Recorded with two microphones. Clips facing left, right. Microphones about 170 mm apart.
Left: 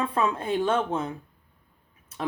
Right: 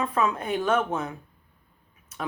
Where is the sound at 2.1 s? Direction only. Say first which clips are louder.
Left 1 dB; 30° left (ahead or behind).